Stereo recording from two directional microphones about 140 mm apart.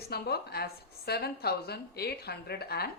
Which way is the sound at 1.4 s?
90° left.